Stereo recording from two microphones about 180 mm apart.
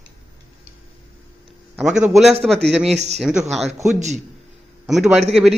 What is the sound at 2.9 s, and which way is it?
Speech, 40° right (ahead or behind).